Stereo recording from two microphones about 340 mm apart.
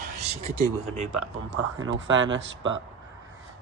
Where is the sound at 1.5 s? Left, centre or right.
Right.